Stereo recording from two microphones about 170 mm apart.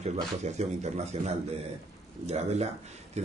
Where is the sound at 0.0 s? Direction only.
40° right (ahead or behind).